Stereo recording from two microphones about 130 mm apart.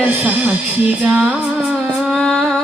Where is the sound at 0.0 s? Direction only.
10° right (ahead or behind).